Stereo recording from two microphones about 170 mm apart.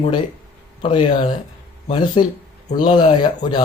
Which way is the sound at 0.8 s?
30° left (ahead or behind).